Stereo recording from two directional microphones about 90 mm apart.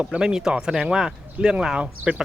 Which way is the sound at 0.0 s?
10° right (ahead or behind).